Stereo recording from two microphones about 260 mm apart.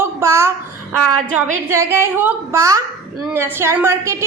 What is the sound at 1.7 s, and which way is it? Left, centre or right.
A woman's voice, centre.